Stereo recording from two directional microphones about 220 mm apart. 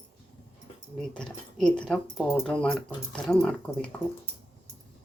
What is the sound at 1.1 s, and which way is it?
Speech, 5° left (ahead or behind).